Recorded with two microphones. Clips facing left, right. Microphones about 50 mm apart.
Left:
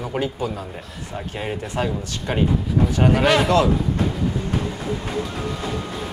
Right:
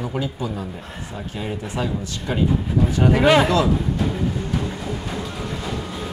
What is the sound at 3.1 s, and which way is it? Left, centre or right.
Speech, right.